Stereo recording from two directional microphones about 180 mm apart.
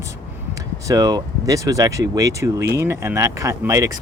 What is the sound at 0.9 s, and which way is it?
Speech, 20° right (ahead or behind).